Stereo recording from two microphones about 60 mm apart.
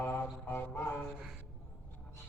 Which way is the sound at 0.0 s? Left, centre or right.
Left.